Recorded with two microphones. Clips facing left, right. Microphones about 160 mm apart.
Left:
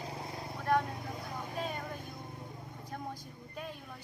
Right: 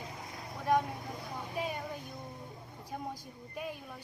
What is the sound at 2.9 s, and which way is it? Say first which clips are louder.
Speech: right 2 dB; 10° right (ahead or behind).